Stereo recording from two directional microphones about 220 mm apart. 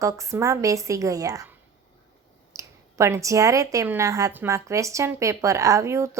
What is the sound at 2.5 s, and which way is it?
Speech, 15° right (ahead or behind).